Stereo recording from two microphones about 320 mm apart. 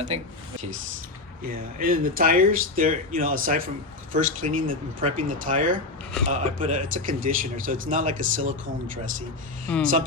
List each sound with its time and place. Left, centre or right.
0.1 s speech: centre
1.5 s speech: right
9.7 s speech: centre